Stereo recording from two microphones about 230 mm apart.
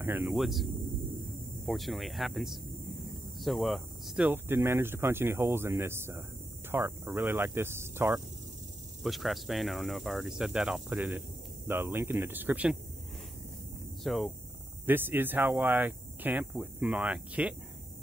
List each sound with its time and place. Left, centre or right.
0.0 s speech: centre
1.7 s speech: centre
9.0 s speech: centre
14.0 s speech: centre